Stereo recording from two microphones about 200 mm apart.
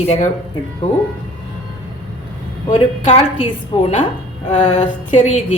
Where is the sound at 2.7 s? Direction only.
30° left (ahead or behind).